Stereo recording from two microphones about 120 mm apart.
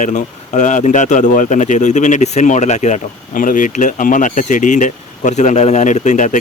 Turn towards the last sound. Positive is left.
turn(degrees=90)